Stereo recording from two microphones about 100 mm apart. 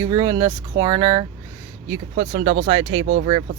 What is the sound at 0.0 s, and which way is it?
Speech, 35° right (ahead or behind).